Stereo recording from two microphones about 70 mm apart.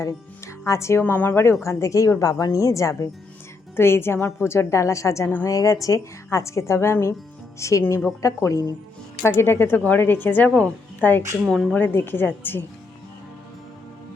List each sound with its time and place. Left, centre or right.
0.0 s a woman's voice: left
1.0 s speech: left
1.6 s a woman's voice: left
3.8 s a woman's voice: left
9.2 s a woman's voice: left